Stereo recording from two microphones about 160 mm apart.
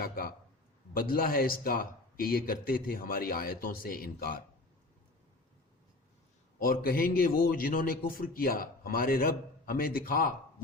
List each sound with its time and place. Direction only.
0.0 s a man's voice: 70° left (ahead or behind)
6.6 s a man's voice: 65° left (ahead or behind)